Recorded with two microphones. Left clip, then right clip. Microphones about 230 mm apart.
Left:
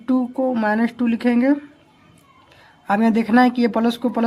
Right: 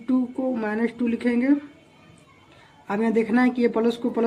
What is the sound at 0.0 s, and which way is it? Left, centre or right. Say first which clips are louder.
Speech: left 5 dB; left.